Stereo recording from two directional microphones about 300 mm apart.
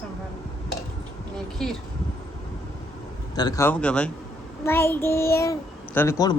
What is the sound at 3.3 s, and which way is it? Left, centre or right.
A child's voice, centre.